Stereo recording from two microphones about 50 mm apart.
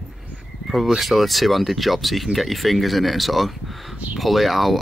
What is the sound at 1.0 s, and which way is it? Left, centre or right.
Speech, centre.